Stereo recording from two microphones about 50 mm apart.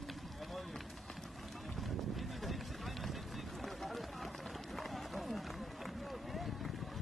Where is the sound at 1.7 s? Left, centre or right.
Centre.